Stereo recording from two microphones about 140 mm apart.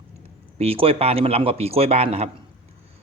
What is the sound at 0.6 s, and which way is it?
A man's voice, 45° right (ahead or behind).